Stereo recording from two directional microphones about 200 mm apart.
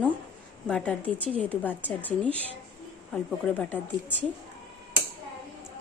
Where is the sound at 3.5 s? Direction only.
10° left (ahead or behind).